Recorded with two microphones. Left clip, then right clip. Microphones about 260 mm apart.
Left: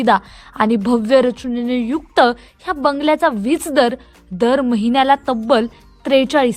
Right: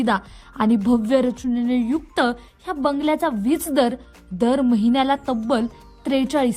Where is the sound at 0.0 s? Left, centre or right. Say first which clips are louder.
Left 7 dB; centre.